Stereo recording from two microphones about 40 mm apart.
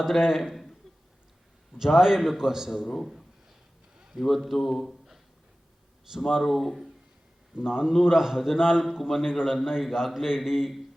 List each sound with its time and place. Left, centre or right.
0.2 s a man's voice: centre
1.8 s a man's voice: centre
2.6 s speech: centre
7.5 s a man's voice: centre